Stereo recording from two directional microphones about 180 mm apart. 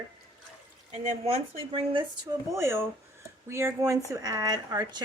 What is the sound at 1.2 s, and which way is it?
Speech, 30° right (ahead or behind).